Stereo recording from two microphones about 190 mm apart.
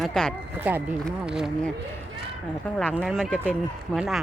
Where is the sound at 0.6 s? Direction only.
10° right (ahead or behind).